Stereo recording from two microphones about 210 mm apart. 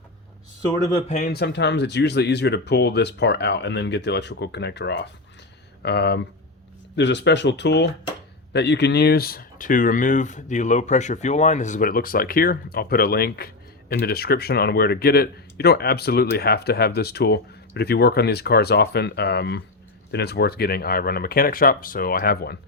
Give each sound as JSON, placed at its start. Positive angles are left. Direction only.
{"t": 1.0, "sound": "speech", "side_deg": 35}
{"t": 1.3, "sound": "speech", "side_deg": 55}